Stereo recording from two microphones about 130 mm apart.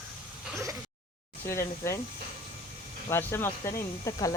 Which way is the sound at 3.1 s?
15° left (ahead or behind).